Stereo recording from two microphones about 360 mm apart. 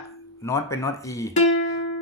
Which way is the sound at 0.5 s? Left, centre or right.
Centre.